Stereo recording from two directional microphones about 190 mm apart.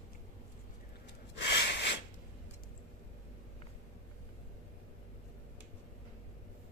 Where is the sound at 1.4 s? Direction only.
60° left (ahead or behind).